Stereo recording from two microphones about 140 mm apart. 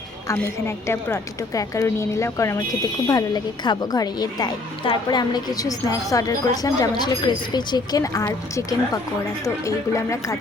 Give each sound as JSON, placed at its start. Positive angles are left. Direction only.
{"t": 0.9, "sound": "a woman's voice", "side_deg": 20}